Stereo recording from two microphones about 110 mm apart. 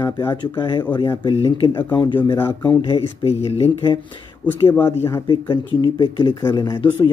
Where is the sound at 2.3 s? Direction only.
20° left (ahead or behind).